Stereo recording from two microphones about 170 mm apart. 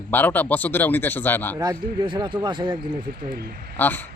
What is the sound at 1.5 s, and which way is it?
A man's voice, 25° right (ahead or behind).